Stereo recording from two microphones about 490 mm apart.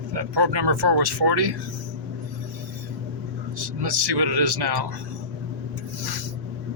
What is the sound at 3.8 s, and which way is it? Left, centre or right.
Speech, right.